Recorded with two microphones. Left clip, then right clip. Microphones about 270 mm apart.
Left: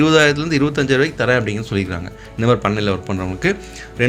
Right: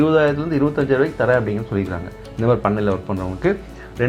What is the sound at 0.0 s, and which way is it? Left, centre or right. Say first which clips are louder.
Speech: left 3 dB; left.